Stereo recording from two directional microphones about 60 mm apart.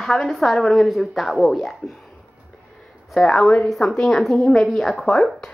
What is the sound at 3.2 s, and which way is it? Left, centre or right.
Speech, centre.